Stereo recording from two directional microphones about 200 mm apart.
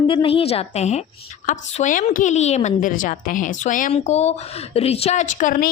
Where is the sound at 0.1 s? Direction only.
25° left (ahead or behind).